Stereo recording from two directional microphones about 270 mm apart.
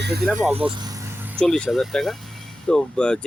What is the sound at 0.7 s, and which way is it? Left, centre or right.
Vehicle, centre.